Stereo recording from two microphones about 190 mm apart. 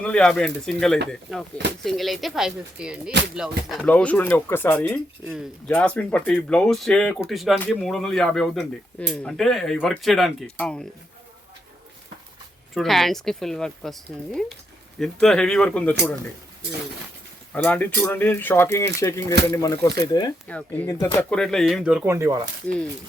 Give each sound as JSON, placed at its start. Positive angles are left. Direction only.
{"t": 0.0, "sound": "speech", "side_deg": 5}
{"t": 3.8, "sound": "speech", "side_deg": 10}
{"t": 5.2, "sound": "speech", "side_deg": 0}
{"t": 12.7, "sound": "speech", "side_deg": 0}
{"t": 15.0, "sound": "speech", "side_deg": 5}
{"t": 17.5, "sound": "speech", "side_deg": 10}
{"t": 20.5, "sound": "speech", "side_deg": 10}